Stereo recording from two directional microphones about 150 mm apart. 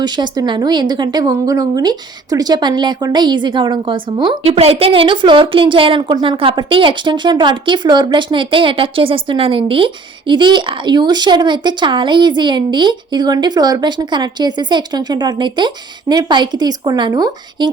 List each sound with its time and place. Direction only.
0.0 s a woman's voice: 30° right (ahead or behind)